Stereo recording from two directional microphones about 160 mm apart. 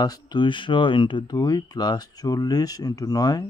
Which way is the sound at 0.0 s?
25° left (ahead or behind).